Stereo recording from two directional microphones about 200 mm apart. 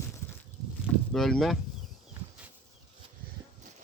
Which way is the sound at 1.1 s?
Centre (ahead or behind).